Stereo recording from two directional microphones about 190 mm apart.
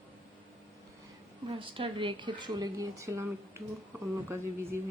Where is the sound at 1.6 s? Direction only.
30° right (ahead or behind).